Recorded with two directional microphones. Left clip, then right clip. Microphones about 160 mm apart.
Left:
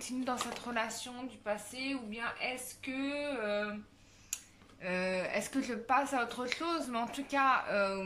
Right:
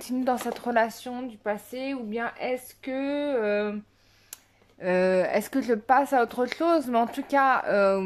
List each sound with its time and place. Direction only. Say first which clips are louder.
0.0 s speech: right 10 dB; 55° right (ahead or behind)